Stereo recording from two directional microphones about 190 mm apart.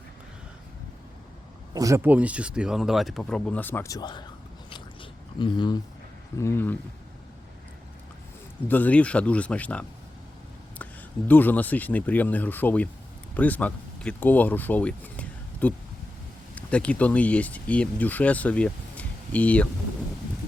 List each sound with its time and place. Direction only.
1.7 s speech: 15° right (ahead or behind); by 4.3 s 25° left (ahead or behind)
5.4 s speech: 25° left (ahead or behind)
8.6 s speech: 10° left (ahead or behind)
11.3 s speech: 10° left (ahead or behind)